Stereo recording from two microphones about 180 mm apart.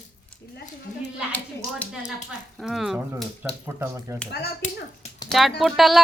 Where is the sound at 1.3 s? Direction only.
10° left (ahead or behind).